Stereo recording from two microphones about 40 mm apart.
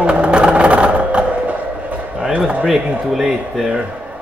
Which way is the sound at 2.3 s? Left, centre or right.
Right.